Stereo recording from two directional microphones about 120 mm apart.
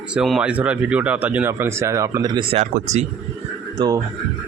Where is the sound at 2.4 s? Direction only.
70° right (ahead or behind).